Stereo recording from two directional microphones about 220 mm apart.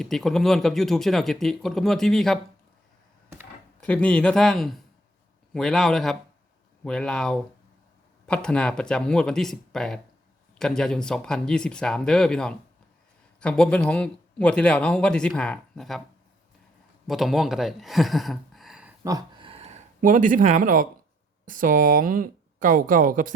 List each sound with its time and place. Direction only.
0.0 s speech: centre (ahead or behind)
3.8 s speech: 5° left (ahead or behind)
17.1 s speech: centre (ahead or behind)
19.0 s a sound: 20° right (ahead or behind); by 20.8 s 40° right (ahead or behind)
21.4 s speech: 40° right (ahead or behind)